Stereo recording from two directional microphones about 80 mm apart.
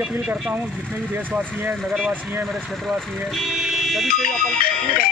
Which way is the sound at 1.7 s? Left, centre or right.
Centre.